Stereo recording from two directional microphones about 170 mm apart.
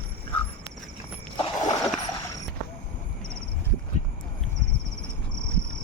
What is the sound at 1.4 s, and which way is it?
Horse, 20° left (ahead or behind).